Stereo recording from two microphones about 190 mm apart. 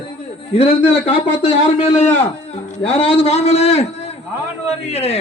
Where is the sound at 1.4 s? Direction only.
30° left (ahead or behind).